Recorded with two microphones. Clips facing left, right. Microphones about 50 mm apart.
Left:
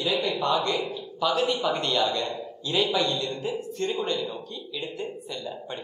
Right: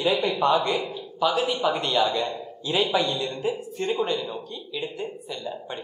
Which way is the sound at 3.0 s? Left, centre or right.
Centre.